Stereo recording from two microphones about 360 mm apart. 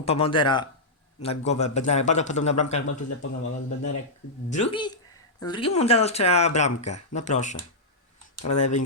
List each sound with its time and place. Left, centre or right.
0.0 s a man's voice: centre
3.4 s speech: left
4.4 s a man's voice: centre
8.5 s a man's voice: centre